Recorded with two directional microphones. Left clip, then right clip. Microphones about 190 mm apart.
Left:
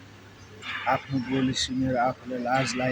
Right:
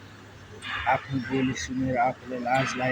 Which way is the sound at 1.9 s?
10° left (ahead or behind).